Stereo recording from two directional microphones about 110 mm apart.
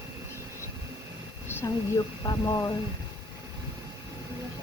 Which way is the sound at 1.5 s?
20° left (ahead or behind).